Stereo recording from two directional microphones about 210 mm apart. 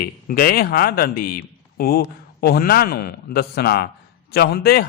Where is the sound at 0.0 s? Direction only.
45° left (ahead or behind).